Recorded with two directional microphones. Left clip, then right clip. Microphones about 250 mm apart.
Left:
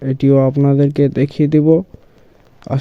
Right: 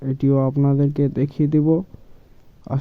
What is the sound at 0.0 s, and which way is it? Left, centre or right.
Speech, left.